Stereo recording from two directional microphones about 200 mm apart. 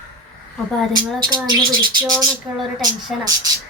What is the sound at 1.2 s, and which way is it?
Speech, 20° right (ahead or behind).